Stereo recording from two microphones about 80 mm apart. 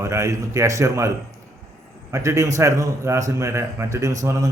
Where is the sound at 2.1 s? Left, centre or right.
Right.